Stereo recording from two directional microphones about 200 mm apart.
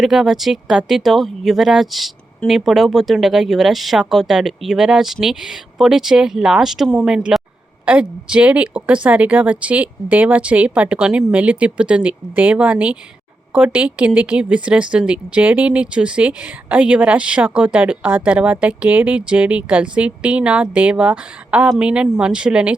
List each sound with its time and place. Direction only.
0.0 s speech: centre (ahead or behind)